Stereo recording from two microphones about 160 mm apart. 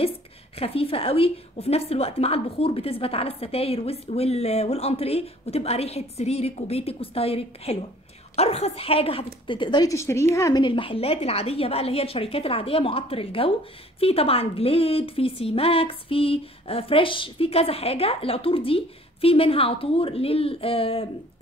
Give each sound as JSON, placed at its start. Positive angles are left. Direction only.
{"t": 0.6, "sound": "a woman's voice", "side_deg": 35}
{"t": 10.6, "sound": "a woman's voice", "side_deg": 30}